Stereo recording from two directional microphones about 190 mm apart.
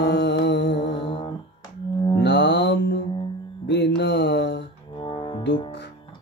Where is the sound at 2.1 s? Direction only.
65° left (ahead or behind).